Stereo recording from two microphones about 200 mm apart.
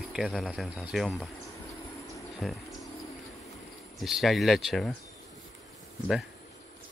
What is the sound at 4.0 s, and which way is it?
Speech, centre (ahead or behind).